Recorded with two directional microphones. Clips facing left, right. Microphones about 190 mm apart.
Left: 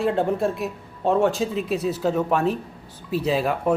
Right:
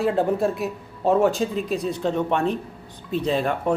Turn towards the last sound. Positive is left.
turn(degrees=5)  # may be behind; listen again after turning